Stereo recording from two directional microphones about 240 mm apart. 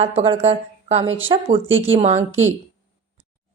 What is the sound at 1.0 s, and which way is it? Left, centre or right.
Speech, right.